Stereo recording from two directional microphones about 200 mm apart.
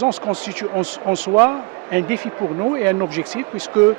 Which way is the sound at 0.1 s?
5° right (ahead or behind).